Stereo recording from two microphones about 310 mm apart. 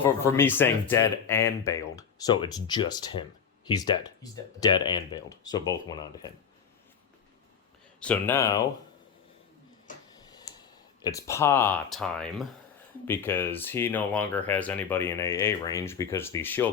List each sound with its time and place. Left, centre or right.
0.0 s speech: centre
8.0 s speech: centre
9.9 s tick-tock: left
11.0 s speech: centre